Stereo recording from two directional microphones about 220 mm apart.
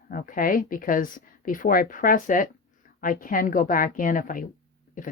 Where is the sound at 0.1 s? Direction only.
40° left (ahead or behind).